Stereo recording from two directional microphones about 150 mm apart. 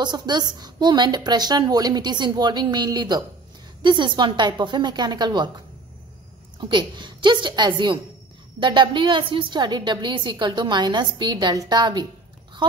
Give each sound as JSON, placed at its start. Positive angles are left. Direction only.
{"t": 0.0, "sound": "a woman's voice", "side_deg": -30}
{"t": 6.6, "sound": "a woman's voice", "side_deg": -30}